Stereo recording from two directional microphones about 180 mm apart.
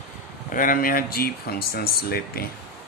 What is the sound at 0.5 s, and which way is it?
Speech, 50° left (ahead or behind).